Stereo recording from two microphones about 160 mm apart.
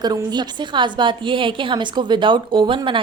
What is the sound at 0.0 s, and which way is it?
A woman's voice, 25° right (ahead or behind).